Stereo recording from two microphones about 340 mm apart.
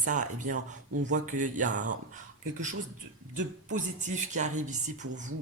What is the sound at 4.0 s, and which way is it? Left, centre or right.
Speech, right.